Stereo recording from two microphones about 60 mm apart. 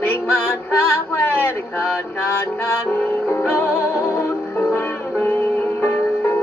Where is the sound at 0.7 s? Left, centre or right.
Left.